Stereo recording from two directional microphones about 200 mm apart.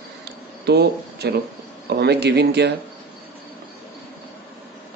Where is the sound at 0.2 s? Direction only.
55° right (ahead or behind).